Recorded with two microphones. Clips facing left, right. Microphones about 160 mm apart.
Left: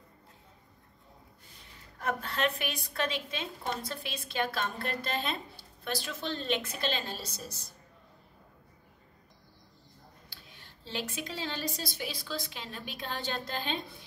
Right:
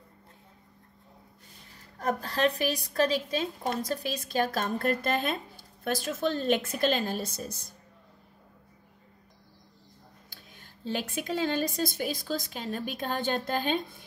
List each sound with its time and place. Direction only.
2.0 s a woman's voice: 35° right (ahead or behind); by 7.7 s 50° right (ahead or behind)
10.3 s a woman's voice: 45° right (ahead or behind)